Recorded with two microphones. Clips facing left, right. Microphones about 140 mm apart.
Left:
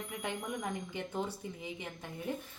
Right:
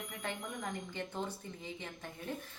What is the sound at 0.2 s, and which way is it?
A woman's voice, 15° left (ahead or behind).